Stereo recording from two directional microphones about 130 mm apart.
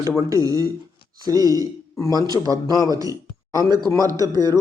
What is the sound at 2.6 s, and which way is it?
Speech, 30° left (ahead or behind).